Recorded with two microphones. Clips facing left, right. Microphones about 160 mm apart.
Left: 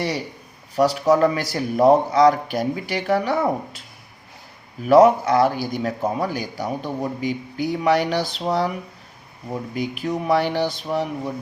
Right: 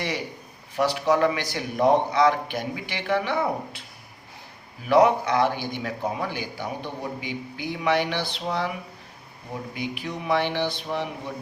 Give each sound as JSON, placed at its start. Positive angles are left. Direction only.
{"t": 0.8, "sound": "speech", "side_deg": 40}
{"t": 4.9, "sound": "speech", "side_deg": 40}
{"t": 9.7, "sound": "speech", "side_deg": 40}